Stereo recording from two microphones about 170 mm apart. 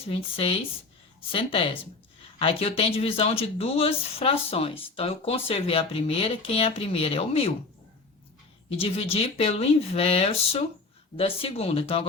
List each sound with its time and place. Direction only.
0.0 s speech: 35° left (ahead or behind)
8.8 s speech: 35° left (ahead or behind)